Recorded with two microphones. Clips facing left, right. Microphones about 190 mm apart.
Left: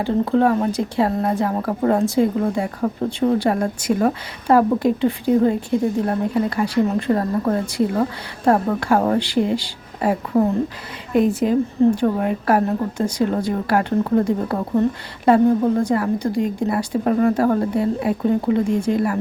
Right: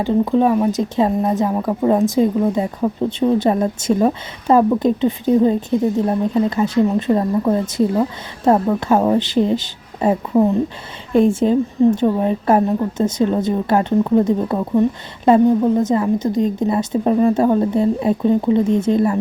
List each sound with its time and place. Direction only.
0.0 s speech: 15° right (ahead or behind)
11.1 s speech: 30° right (ahead or behind)